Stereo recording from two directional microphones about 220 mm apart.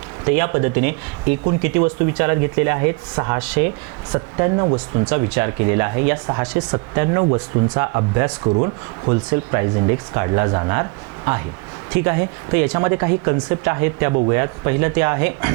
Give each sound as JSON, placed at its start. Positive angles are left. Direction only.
{"t": 0.3, "sound": "speech", "side_deg": -15}
{"t": 11.9, "sound": "speech", "side_deg": -15}